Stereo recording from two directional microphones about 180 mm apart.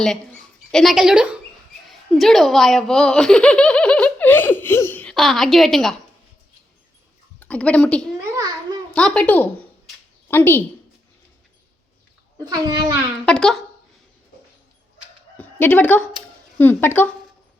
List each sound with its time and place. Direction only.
0.7 s speech: centre (ahead or behind)
7.3 s a woman's voice: 5° left (ahead or behind)
9.0 s a sound: 5° left (ahead or behind)
12.4 s a child's voice: 20° right (ahead or behind)
13.2 s speech: 5° left (ahead or behind)
15.4 s a woman's voice: 10° left (ahead or behind)